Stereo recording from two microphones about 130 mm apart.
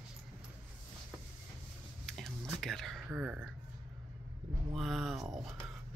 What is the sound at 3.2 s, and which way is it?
Speech, 15° right (ahead or behind).